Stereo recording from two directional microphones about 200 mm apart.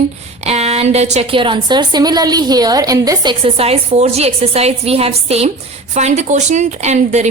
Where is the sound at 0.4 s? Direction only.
30° right (ahead or behind).